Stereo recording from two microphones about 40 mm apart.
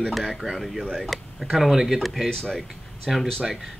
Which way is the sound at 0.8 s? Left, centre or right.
Centre.